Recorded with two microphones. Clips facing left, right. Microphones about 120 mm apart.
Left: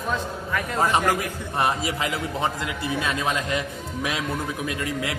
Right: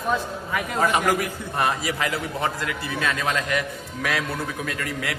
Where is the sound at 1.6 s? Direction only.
25° left (ahead or behind).